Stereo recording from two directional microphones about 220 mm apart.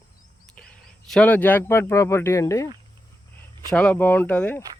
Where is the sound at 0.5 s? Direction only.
5° left (ahead or behind).